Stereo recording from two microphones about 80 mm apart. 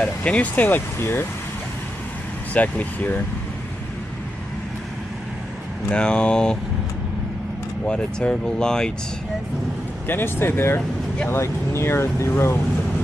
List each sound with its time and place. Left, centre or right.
0.0 s speech: centre
2.5 s speech: centre
5.9 s speech: centre
7.8 s speech: centre
10.0 s speech: left